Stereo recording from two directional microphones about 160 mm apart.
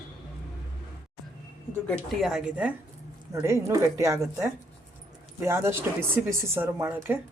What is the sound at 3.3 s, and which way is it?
Speech, 15° right (ahead or behind).